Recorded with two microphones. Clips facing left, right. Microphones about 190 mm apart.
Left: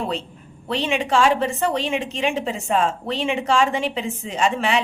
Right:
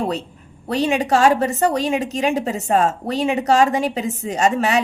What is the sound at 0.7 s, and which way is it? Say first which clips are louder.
A woman's voice: right 4 dB; 40° right (ahead or behind).